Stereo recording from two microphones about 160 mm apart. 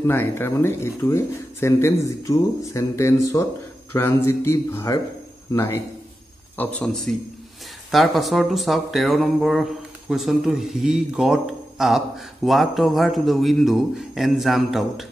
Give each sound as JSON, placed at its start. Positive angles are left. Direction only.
{"t": 0.0, "sound": "a man's voice", "side_deg": 15}
{"t": 6.5, "sound": "speech", "side_deg": 10}